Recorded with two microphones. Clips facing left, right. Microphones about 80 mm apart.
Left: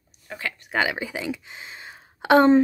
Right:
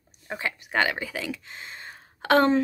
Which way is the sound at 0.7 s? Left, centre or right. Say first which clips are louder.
Left 1 dB; centre.